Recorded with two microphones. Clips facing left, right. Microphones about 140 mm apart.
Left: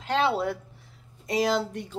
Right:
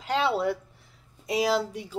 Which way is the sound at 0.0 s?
Centre (ahead or behind).